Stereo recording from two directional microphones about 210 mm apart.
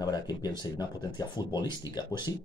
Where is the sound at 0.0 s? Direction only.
20° left (ahead or behind).